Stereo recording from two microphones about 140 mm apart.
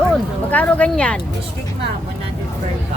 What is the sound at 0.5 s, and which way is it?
Speech, 10° left (ahead or behind).